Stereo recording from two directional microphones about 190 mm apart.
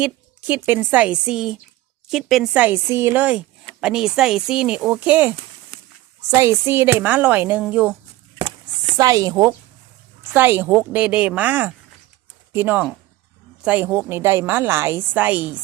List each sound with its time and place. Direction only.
0.0 s a woman's voice: 10° right (ahead or behind)
6.3 s a woman's voice: 15° right (ahead or behind)
8.4 s a sound: 30° right (ahead or behind)
9.0 s a woman's voice: 20° right (ahead or behind)